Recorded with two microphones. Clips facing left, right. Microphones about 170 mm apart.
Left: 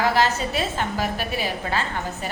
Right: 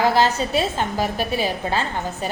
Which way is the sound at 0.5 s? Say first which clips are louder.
Right 4 dB; 25° right (ahead or behind).